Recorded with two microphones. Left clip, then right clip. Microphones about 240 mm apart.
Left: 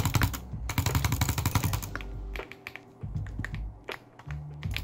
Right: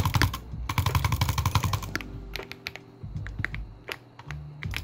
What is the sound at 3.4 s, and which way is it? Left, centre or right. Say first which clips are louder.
Music: right 6 dB; right.